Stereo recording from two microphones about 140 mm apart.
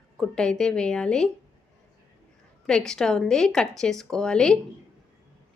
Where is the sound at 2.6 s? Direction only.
5° left (ahead or behind).